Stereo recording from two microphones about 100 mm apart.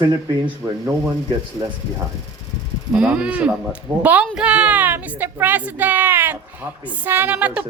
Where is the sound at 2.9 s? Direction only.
10° right (ahead or behind).